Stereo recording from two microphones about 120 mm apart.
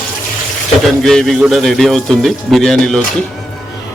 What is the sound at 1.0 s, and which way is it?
Speech, centre (ahead or behind).